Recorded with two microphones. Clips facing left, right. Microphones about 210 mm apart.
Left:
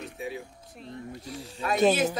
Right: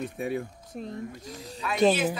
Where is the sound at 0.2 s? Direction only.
55° right (ahead or behind).